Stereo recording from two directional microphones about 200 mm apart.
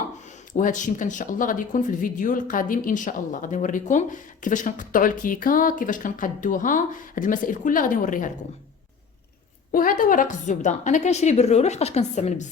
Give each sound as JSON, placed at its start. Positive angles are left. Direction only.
{"t": 0.5, "sound": "speech", "side_deg": 40}
{"t": 9.7, "sound": "speech", "side_deg": 45}